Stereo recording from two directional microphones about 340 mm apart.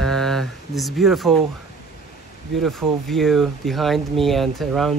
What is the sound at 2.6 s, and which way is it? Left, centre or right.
Speech, centre.